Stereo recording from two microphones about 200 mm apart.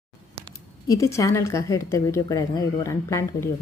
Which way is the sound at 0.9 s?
15° left (ahead or behind).